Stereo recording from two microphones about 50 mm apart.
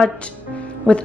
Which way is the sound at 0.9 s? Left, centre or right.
Left.